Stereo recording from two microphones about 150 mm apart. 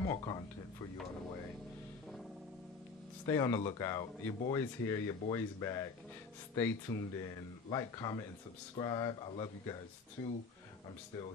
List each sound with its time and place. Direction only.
0.1 s speech: 30° left (ahead or behind)
3.3 s speech: 20° left (ahead or behind)